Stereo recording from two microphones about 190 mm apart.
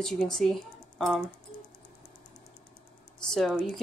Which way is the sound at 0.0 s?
5° left (ahead or behind).